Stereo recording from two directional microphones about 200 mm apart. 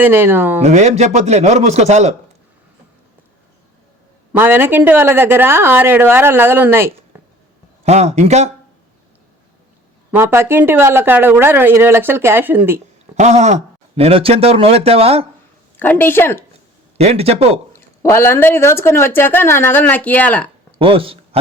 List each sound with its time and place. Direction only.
0.0 s speech: 10° right (ahead or behind)
0.6 s speech: 35° right (ahead or behind)
4.3 s speech: 10° right (ahead or behind)
7.9 s speech: 35° right (ahead or behind)
10.1 s speech: 10° right (ahead or behind)
13.1 s speech: 35° right (ahead or behind)
15.8 s speech: 10° left (ahead or behind)
17.0 s speech: 30° right (ahead or behind)
17.7 s speech: 15° left (ahead or behind)
20.7 s speech: 25° right (ahead or behind)